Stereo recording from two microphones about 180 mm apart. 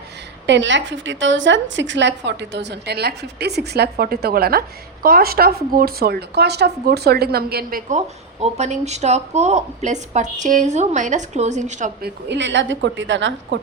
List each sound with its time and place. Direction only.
0.4 s a woman's voice: 85° right; by 11.9 s 40° right (ahead or behind)
12.0 s a woman's voice: 75° right (ahead or behind)